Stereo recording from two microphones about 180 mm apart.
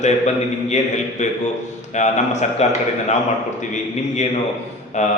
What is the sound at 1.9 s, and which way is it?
Speech, 40° left (ahead or behind).